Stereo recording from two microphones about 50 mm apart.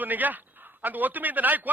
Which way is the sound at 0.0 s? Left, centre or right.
Right.